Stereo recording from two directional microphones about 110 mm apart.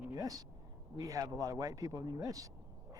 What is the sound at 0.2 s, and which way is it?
Speech, 35° right (ahead or behind).